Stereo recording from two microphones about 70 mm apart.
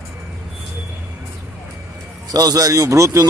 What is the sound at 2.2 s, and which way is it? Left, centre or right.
A man's voice, right.